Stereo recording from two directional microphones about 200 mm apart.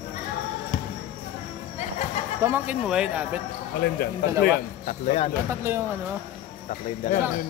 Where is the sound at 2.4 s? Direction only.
10° right (ahead or behind).